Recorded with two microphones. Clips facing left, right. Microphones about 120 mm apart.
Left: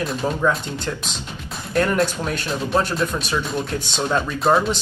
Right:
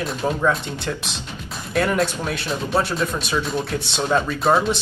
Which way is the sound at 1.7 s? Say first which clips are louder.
Left 1 dB; 5° right (ahead or behind).